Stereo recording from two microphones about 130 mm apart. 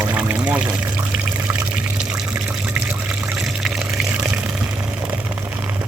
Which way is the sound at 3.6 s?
5° right (ahead or behind).